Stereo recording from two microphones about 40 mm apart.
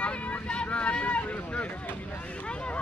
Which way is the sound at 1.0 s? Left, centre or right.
Left.